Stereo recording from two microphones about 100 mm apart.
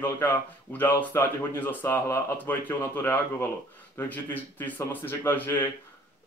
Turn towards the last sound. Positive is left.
turn(degrees=20)  # may be behind; listen again after turning